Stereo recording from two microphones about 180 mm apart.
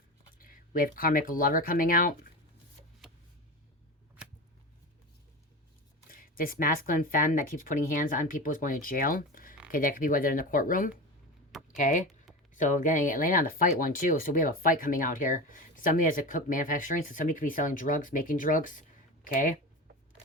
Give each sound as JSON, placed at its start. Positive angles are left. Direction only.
{"t": 0.3, "sound": "speech", "side_deg": 50}
{"t": 6.1, "sound": "speech", "side_deg": 50}